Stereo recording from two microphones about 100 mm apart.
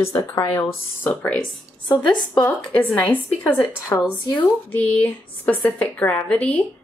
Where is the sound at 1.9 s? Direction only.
45° left (ahead or behind).